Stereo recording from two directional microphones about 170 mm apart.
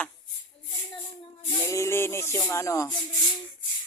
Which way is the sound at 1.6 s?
15° left (ahead or behind).